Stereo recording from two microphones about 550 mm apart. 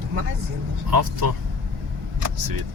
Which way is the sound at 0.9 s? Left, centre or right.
Right.